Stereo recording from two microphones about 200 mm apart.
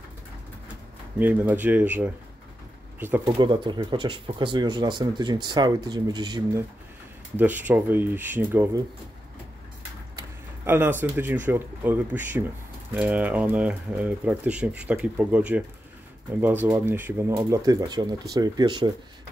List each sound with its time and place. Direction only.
1.2 s speech: 10° right (ahead or behind)
3.3 s speech: 25° right (ahead or behind)
7.3 s speech: 10° right (ahead or behind)
10.1 s speech: 10° right (ahead or behind)
16.6 s speech: 10° right (ahead or behind)